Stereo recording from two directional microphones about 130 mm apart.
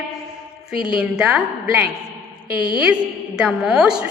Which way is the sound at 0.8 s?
5° right (ahead or behind).